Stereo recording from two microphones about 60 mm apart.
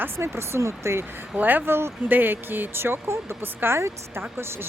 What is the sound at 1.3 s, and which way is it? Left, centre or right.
Speech, right.